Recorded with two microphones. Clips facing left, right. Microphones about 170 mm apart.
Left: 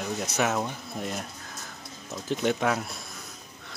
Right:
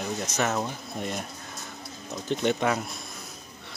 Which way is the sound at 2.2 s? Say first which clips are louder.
Right 1 dB; 5° left (ahead or behind).